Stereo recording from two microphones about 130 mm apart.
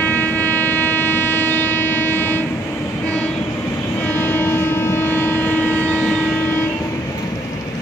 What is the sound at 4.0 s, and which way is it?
Vehicle, 15° left (ahead or behind).